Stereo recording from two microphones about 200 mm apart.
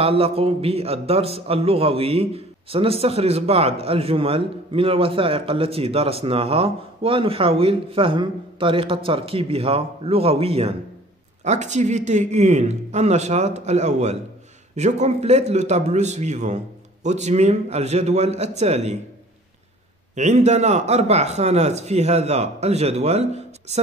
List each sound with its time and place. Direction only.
0.0 s a man's voice: 30° right (ahead or behind)
20.2 s a man's voice: 35° right (ahead or behind)